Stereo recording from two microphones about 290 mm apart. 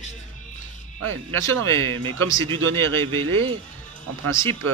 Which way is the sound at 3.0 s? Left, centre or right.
Centre.